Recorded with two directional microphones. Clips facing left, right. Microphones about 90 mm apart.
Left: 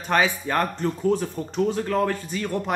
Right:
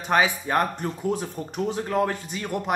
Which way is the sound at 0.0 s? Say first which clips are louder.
Even; 15° right (ahead or behind).